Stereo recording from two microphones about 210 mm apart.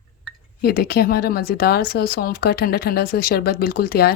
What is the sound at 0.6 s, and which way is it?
Speech, 45° left (ahead or behind).